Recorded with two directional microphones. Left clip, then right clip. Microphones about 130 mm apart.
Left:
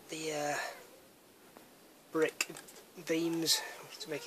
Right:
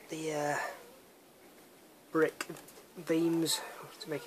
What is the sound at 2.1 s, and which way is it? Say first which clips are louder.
Speech: right 2 dB; 10° left (ahead or behind).